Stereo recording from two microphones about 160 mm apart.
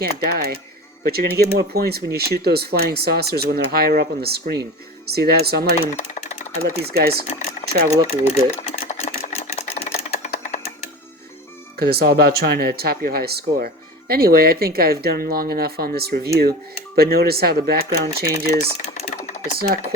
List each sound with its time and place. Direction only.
0.2 s speech: 70° right (ahead or behind)
6.0 s a sound: 45° left (ahead or behind)
6.8 s speech: 80° right
7.6 s a sound: 40° left (ahead or behind)
8.0 s speech: 40° left (ahead or behind)
8.5 s sewing machine: 40° left (ahead or behind)
11.8 s speech: 80° right
18.7 s typing: 45° left (ahead or behind)
19.5 s speech: 75° right (ahead or behind)